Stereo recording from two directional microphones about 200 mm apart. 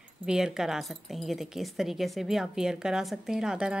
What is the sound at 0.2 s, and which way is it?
Speech, 5° right (ahead or behind).